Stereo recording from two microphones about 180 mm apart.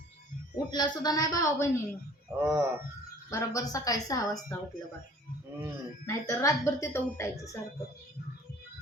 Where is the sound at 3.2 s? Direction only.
20° left (ahead or behind).